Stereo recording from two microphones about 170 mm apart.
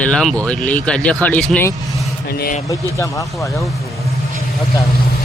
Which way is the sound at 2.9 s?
20° left (ahead or behind).